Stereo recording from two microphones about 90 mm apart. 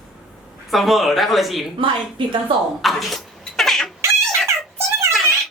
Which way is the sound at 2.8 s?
Centre (ahead or behind).